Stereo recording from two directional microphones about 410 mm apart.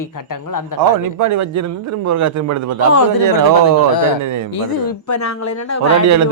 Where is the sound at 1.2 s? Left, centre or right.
Right.